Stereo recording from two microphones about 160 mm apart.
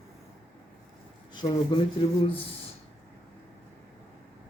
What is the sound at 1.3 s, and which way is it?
Speech, 25° left (ahead or behind).